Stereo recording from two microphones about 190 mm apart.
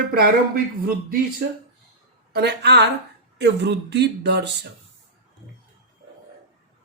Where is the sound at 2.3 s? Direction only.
60° right (ahead or behind).